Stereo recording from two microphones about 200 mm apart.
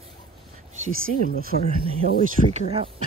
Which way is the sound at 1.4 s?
50° right (ahead or behind).